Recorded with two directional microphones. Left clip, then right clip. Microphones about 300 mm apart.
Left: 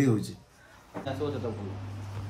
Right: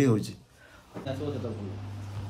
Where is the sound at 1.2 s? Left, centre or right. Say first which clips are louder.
Left 3 dB; centre.